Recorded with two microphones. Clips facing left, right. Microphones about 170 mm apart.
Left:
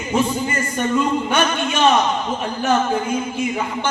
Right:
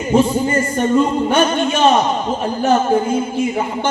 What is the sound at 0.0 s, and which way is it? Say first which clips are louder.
A man's voice: right 5 dB; 35° right (ahead or behind).